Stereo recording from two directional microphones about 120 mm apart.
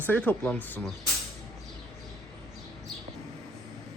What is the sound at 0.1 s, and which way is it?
Speech, 15° left (ahead or behind).